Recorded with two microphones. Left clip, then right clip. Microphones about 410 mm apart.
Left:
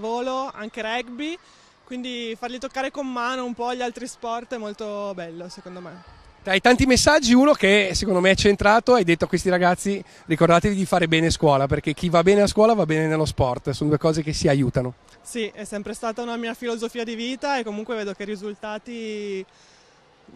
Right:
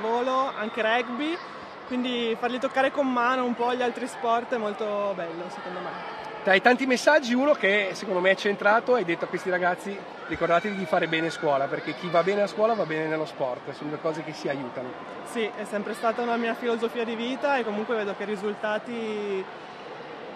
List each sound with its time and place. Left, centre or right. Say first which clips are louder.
0.0 s speech: right 1 dB; left
6.4 s speech: left 2 dB; left
15.3 s speech: even; left